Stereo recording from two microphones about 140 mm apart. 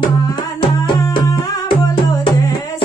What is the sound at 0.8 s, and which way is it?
Music, 35° left (ahead or behind).